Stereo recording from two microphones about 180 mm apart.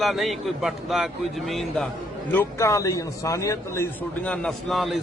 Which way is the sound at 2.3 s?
15° left (ahead or behind).